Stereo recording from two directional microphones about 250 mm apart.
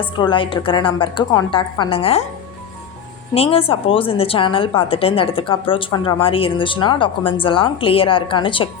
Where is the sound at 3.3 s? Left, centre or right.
Left.